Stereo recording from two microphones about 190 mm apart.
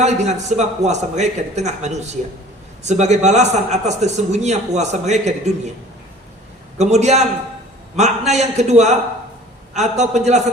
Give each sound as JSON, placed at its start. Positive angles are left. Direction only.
{"t": 0.0, "sound": "a man's voice", "side_deg": -35}
{"t": 6.7, "sound": "a man's voice", "side_deg": -35}